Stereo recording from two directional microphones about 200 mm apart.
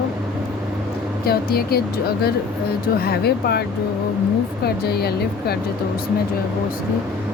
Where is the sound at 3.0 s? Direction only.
50° left (ahead or behind).